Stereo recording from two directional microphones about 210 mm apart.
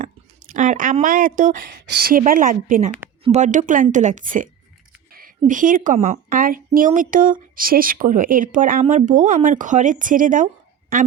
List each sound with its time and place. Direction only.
0.0 s speech: 35° right (ahead or behind)